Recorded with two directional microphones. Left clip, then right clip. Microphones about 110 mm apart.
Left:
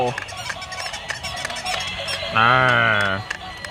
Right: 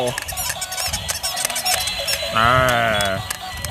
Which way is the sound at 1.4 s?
40° right (ahead or behind).